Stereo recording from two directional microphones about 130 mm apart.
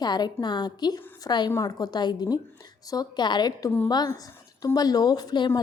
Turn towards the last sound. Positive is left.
turn(degrees=35)  # may be behind; listen again after turning